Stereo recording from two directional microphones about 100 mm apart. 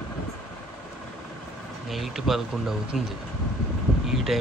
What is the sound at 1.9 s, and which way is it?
Speech, centre (ahead or behind).